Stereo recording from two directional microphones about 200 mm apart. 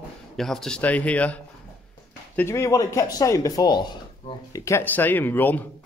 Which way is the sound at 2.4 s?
15° left (ahead or behind).